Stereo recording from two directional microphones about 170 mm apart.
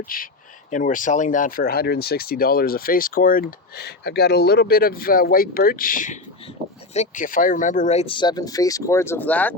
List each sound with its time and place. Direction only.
0.1 s speech: 55° left (ahead or behind); by 9.6 s 10° left (ahead or behind)